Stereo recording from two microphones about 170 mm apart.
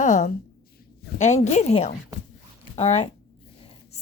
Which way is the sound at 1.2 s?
45° left (ahead or behind).